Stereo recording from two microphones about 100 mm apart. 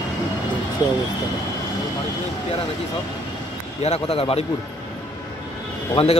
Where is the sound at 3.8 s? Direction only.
80° left.